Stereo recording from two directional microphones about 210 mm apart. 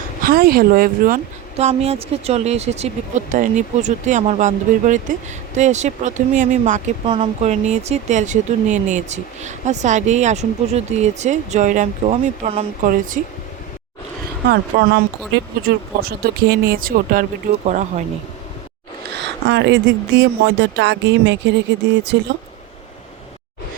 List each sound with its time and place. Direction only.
0.2 s speech: 45° right (ahead or behind)
14.4 s speech: 45° right (ahead or behind)
19.1 s speech: 55° right (ahead or behind)